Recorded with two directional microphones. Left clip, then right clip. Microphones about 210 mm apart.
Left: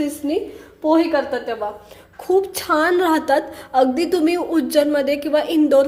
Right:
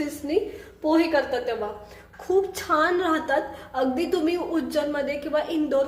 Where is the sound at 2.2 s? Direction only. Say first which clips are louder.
Left 5 dB; 35° left (ahead or behind).